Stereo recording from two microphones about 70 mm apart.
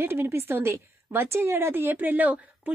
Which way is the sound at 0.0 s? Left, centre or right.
Right.